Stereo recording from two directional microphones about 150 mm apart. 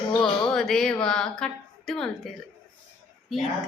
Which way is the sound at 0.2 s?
5° left (ahead or behind).